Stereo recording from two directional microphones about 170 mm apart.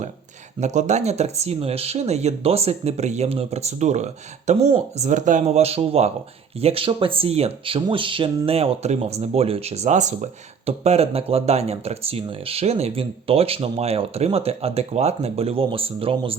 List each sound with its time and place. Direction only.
0.6 s speech: 45° right (ahead or behind)